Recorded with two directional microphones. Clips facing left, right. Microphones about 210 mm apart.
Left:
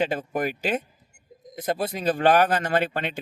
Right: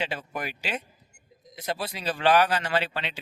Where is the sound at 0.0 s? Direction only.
50° left (ahead or behind).